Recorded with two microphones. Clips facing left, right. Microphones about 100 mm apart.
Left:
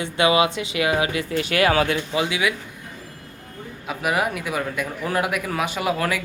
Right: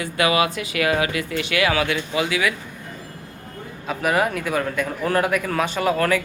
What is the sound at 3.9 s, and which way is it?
Speech, 5° left (ahead or behind).